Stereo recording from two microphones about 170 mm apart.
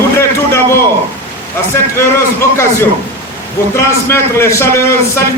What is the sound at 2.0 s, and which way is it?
A man's voice, 15° left (ahead or behind).